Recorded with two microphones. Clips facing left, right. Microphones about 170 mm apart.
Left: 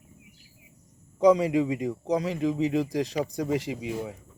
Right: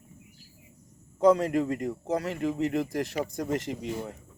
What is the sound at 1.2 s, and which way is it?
Speech, 15° left (ahead or behind).